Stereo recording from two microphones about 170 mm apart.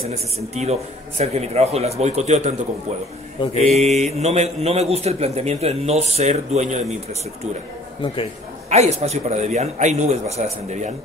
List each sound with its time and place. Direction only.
0.0 s a man's voice: 40° right (ahead or behind)
3.4 s mantra: 30° left (ahead or behind)
3.7 s a man's voice: 40° right (ahead or behind)
8.6 s a man's voice: 40° right (ahead or behind)